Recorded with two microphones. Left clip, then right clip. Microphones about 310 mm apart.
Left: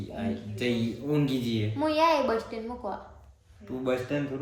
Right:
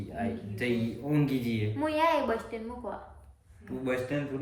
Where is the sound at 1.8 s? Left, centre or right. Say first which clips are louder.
Left 3 dB; centre.